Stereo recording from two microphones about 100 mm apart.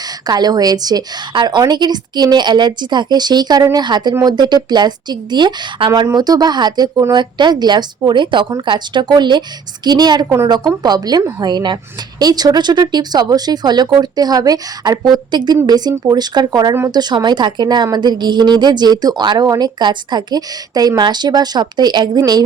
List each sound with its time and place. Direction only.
0.0 s a woman's voice: 40° right (ahead or behind)